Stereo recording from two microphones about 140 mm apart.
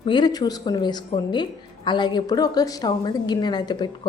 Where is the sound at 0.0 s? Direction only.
35° left (ahead or behind).